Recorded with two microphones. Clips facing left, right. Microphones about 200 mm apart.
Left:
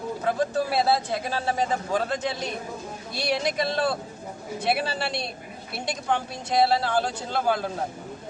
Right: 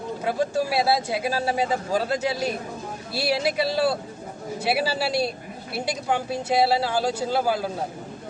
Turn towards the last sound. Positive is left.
turn(degrees=-5)  # may be behind; listen again after turning